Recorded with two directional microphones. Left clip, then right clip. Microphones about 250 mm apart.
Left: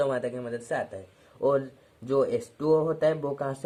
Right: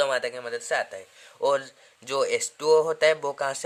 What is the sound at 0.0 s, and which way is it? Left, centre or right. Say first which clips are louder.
Speech: right 2 dB; right.